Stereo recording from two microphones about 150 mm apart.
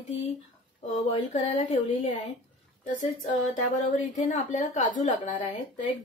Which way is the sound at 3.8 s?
55° left (ahead or behind).